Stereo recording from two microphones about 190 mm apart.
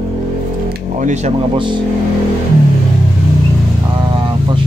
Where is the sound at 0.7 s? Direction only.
40° right (ahead or behind).